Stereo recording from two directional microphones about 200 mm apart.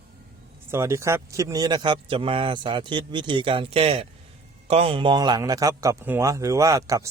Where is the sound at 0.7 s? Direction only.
15° right (ahead or behind).